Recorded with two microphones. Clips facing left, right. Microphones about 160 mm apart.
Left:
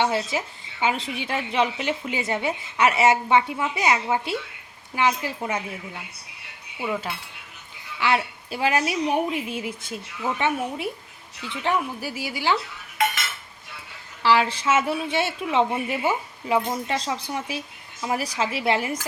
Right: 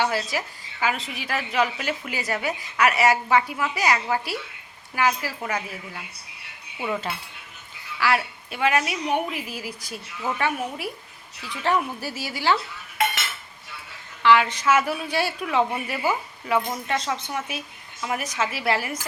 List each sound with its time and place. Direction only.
0.0 s a woman's voice: 25° left (ahead or behind)
6.7 s cutlery: 5° left (ahead or behind)
7.9 s a woman's voice: 20° left (ahead or behind)
11.7 s a woman's voice: 15° left (ahead or behind)
14.2 s a woman's voice: 30° left (ahead or behind)